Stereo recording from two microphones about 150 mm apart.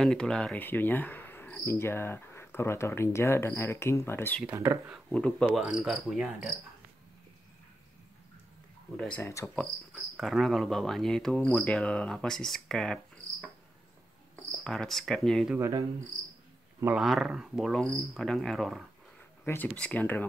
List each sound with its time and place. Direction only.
0.0 s cricket: 5° left (ahead or behind)
5.5 s cricket: 5° right (ahead or behind)
8.9 s cricket: 5° left (ahead or behind)
9.3 s speech: 20° left (ahead or behind)
9.9 s cricket: centre (ahead or behind)
14.6 s cricket: 5° left (ahead or behind)
15.5 s speech: 15° right (ahead or behind)
16.8 s cricket: 5° right (ahead or behind)
19.4 s cricket: 15° left (ahead or behind)